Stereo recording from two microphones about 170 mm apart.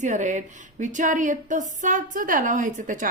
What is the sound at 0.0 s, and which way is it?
A woman's voice, 45° right (ahead or behind).